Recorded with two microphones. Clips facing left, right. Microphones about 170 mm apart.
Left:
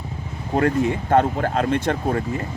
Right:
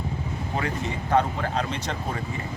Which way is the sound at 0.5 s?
55° left (ahead or behind).